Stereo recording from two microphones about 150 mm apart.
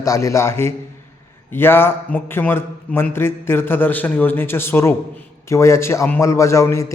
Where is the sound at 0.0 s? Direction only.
20° left (ahead or behind).